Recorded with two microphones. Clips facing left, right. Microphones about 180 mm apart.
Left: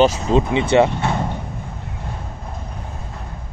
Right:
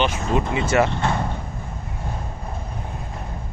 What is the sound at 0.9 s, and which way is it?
Speech, 15° left (ahead or behind).